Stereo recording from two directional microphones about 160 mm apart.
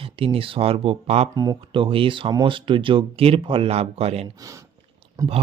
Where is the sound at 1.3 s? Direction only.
25° right (ahead or behind).